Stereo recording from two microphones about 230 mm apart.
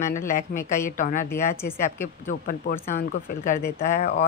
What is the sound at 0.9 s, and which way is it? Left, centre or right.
Speech, left.